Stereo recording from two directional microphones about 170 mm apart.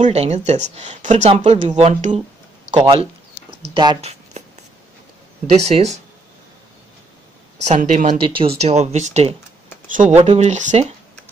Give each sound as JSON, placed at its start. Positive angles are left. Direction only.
{"t": 0.0, "sound": "speech", "side_deg": -40}
{"t": 2.7, "sound": "speech", "side_deg": -25}
{"t": 5.5, "sound": "speech", "side_deg": -40}
{"t": 7.6, "sound": "speech", "side_deg": -45}
{"t": 8.3, "sound": "speech", "side_deg": -35}